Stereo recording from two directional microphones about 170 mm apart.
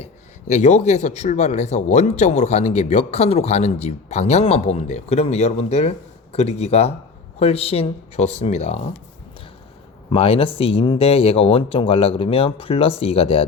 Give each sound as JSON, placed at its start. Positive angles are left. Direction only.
{"t": 0.0, "sound": "a man's voice", "side_deg": 45}
{"t": 10.1, "sound": "a man's voice", "side_deg": 35}